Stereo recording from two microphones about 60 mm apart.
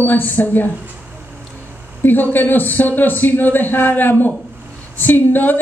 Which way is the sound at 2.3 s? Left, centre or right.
Left.